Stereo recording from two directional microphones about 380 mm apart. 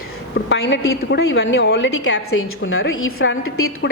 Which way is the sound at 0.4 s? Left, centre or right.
Left.